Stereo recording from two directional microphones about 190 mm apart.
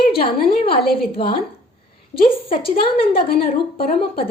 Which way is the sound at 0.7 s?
55° left (ahead or behind).